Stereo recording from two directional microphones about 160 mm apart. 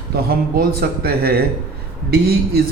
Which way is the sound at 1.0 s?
75° right (ahead or behind).